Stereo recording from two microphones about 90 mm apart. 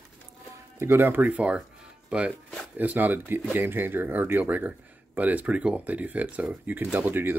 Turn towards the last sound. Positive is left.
turn(degrees=-25)  # may be behind; listen again after turning